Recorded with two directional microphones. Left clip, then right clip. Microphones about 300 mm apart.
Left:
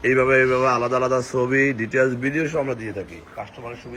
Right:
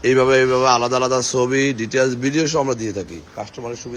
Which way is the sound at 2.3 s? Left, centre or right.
Centre.